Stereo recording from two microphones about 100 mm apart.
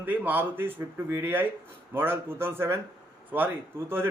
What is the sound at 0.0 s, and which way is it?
A man's voice, 20° right (ahead or behind).